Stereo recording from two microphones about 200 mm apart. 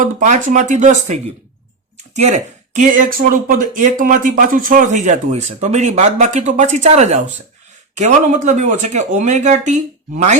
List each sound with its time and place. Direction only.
0.0 s speech: 40° right (ahead or behind)